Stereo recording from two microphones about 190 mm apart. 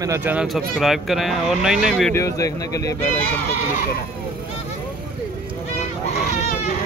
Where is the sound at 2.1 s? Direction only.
15° left (ahead or behind).